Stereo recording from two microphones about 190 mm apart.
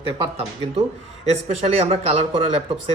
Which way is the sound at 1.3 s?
35° right (ahead or behind).